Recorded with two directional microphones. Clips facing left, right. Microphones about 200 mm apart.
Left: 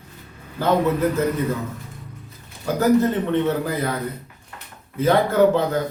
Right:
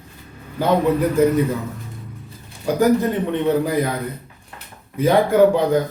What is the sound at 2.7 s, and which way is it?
Speech, 15° right (ahead or behind).